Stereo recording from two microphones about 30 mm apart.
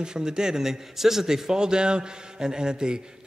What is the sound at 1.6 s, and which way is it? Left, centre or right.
A man's voice, right.